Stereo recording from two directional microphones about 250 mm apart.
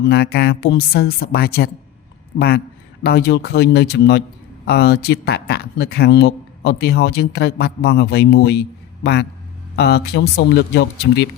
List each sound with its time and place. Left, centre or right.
0.0 s speech: left
3.0 s speech: left
9.7 s speech: left